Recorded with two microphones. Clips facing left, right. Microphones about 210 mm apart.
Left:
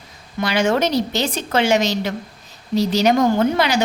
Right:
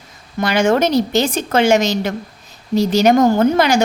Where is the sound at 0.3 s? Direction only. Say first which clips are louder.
Right 3 dB; 50° right (ahead or behind).